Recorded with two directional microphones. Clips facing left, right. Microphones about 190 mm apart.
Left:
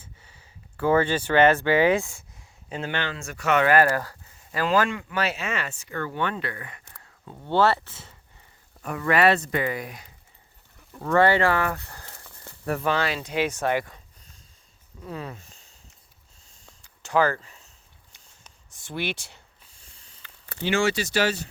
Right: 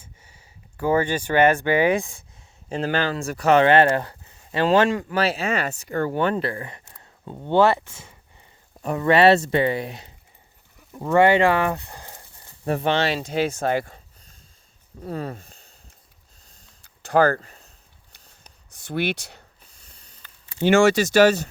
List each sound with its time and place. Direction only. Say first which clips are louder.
0.8 s speech: even; 15° right (ahead or behind)
2.6 s speech: right 6 dB; 35° right (ahead or behind); by 8.1 s 15° right (ahead or behind)
8.8 s speech: right 5 dB; 25° right (ahead or behind)
10.9 s speech: right 3 dB; 15° right (ahead or behind)
13.1 s speech: right 3 dB; 40° right (ahead or behind)
15.0 s speech: right 5 dB; 40° right (ahead or behind)
17.1 s speech: right 4 dB; 50° right (ahead or behind)
19.9 s sniff: even; 40° right (ahead or behind)
20.6 s speech: right 8 dB; 45° right (ahead or behind)